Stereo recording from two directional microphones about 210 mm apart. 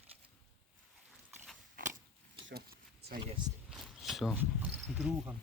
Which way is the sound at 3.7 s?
Centre (ahead or behind).